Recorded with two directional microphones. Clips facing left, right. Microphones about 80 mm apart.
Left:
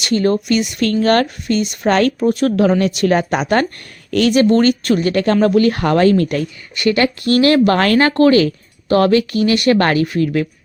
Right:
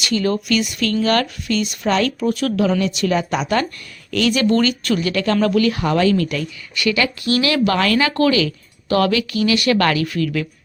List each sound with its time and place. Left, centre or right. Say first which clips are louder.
0.0 s a woman's voice: left 4 dB; left
2.1 s a woman's voice: left 4 dB; left
5.7 s a woman's voice: left 4 dB; left